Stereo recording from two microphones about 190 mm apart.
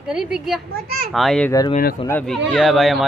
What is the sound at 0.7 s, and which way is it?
Speech, 55° right (ahead or behind).